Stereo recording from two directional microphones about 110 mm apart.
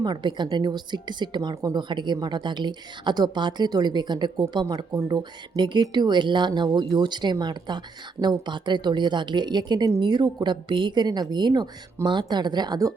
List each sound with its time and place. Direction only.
0.0 s speech: 40° right (ahead or behind)